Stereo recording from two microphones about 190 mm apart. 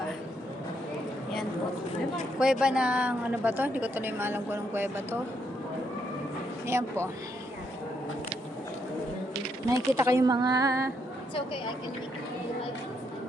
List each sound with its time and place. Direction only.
2.4 s a woman's voice: 5° right (ahead or behind)
6.7 s a woman's voice: 15° right (ahead or behind)
9.7 s a woman's voice: 15° right (ahead or behind)